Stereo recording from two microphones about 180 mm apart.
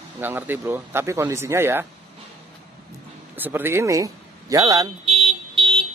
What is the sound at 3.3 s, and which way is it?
Speech, 10° right (ahead or behind).